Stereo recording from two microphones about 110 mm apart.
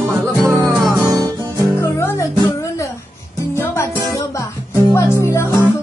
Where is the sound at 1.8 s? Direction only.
25° left (ahead or behind).